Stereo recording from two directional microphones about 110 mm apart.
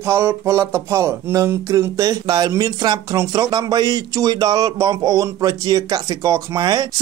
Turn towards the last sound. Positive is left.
turn(degrees=-35)  # may be behind; listen again after turning